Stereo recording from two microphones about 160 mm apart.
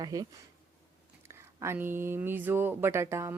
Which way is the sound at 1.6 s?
15° right (ahead or behind).